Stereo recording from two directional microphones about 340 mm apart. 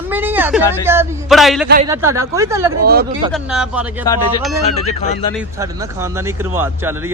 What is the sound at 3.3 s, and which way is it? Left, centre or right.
Speech, centre.